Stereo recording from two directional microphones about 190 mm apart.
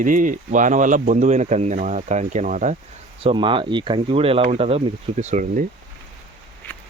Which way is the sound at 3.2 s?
25° right (ahead or behind).